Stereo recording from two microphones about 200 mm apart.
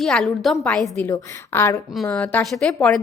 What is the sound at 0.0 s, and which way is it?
A woman's voice, centre (ahead or behind).